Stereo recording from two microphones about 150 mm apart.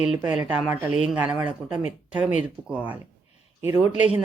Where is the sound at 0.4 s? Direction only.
10° right (ahead or behind).